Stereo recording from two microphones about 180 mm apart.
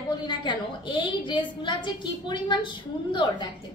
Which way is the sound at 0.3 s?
25° left (ahead or behind).